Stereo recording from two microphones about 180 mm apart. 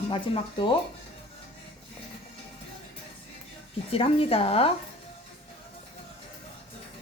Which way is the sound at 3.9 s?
30° left (ahead or behind).